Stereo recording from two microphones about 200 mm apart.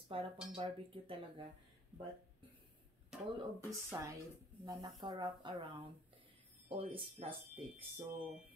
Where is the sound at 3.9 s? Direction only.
15° right (ahead or behind).